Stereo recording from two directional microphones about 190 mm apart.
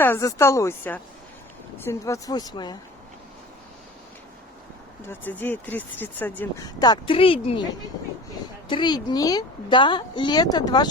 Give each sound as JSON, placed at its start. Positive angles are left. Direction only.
{"t": 0.0, "sound": "a woman's voice", "side_deg": 15}
{"t": 5.0, "sound": "speech", "side_deg": 10}
{"t": 6.7, "sound": "a woman's voice", "side_deg": 20}
{"t": 8.6, "sound": "a woman's voice", "side_deg": 25}